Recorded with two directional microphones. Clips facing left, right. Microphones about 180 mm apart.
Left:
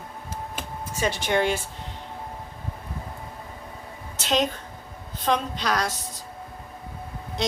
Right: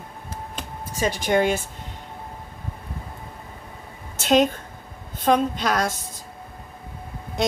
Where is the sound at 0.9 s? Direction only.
40° right (ahead or behind).